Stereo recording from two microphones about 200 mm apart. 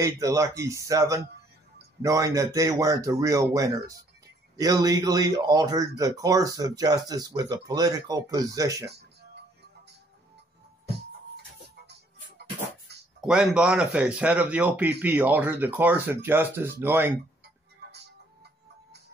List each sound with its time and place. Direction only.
0.0 s speech: 15° right (ahead or behind)
8.8 s music: 55° right (ahead or behind)
13.2 s speech: 5° right (ahead or behind)